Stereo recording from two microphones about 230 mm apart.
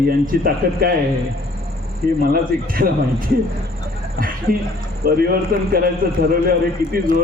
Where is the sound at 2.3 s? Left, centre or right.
Right.